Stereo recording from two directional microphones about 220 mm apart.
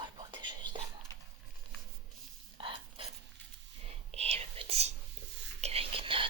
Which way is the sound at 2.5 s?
25° right (ahead or behind).